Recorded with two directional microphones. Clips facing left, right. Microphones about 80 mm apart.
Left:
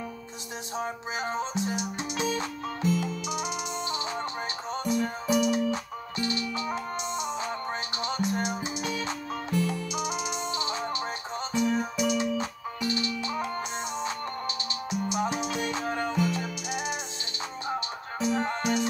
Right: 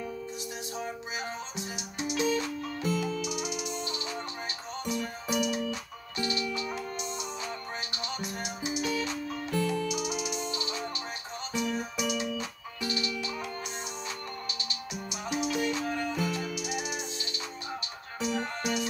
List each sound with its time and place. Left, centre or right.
0.7 s music: left
14.9 s music: left
18.2 s music: left